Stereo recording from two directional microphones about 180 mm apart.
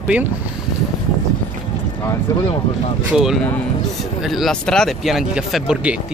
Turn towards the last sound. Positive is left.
turn(degrees=0)  # may be behind; listen again after turning